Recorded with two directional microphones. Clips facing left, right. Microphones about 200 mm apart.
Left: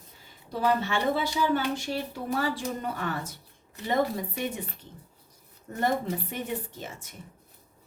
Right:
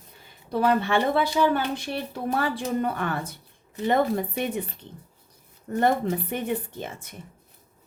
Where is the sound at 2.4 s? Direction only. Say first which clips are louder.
Right 6 dB; 60° right (ahead or behind).